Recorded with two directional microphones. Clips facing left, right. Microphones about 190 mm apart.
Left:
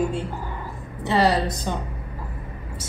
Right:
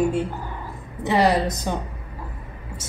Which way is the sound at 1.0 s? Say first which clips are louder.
Right 1 dB; 15° right (ahead or behind).